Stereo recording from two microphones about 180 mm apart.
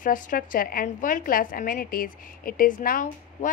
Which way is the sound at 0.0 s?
50° left (ahead or behind).